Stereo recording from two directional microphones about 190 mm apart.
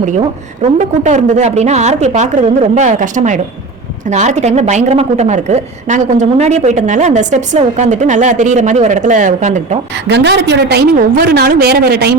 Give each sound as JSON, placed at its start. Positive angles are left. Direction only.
{"t": 0.2, "sound": "a woman's voice", "side_deg": -35}
{"t": 10.1, "sound": "a woman's voice", "side_deg": -65}